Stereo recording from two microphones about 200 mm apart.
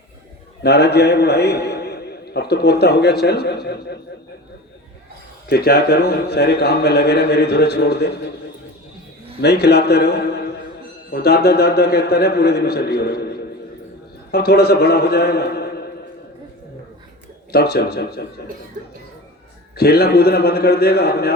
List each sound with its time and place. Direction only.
0.6 s a man's voice: 55° left (ahead or behind)
5.5 s a man's voice: 50° left (ahead or behind)
9.4 s a man's voice: 55° left (ahead or behind)
17.5 s a man's voice: 55° left (ahead or behind)
19.7 s a man's voice: 50° left (ahead or behind)